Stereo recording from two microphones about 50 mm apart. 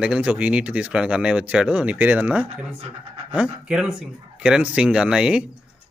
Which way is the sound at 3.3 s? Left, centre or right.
Right.